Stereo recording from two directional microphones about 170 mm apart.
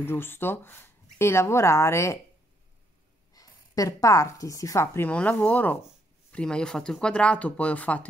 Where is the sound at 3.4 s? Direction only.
20° left (ahead or behind).